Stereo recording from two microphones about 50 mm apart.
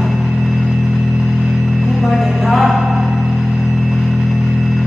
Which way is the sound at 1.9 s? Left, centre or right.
Centre.